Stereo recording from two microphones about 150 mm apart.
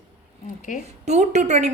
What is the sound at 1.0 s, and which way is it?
Speech, 50° right (ahead or behind).